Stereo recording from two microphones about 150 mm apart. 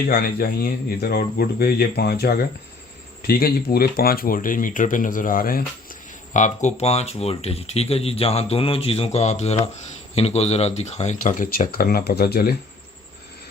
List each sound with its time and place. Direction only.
0.0 s speech: 90° left